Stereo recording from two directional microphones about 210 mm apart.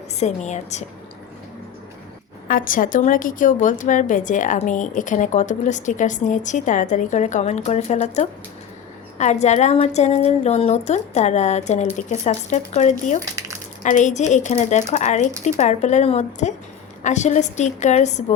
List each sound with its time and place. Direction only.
0.2 s a woman's voice: 35° left (ahead or behind)
2.5 s a woman's voice: 40° left (ahead or behind)